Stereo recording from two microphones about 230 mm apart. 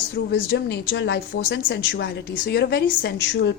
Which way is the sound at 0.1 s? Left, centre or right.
Left.